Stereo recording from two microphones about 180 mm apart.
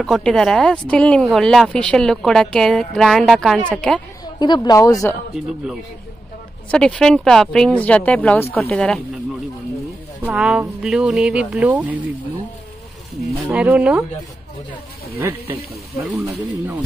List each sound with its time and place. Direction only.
0.0 s speech: centre (ahead or behind)
4.4 s speech: 20° left (ahead or behind)
6.7 s speech: 5° left (ahead or behind)
10.2 s speech: 5° right (ahead or behind)
13.5 s speech: 5° right (ahead or behind)
15.1 s speech: 10° right (ahead or behind)